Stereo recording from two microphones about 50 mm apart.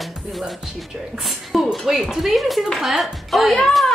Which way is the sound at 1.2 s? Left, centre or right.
Centre.